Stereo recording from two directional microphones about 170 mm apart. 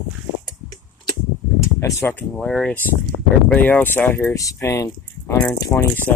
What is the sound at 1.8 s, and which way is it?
Speech, 15° left (ahead or behind).